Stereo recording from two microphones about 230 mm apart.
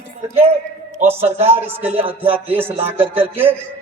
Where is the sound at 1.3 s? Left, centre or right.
Right.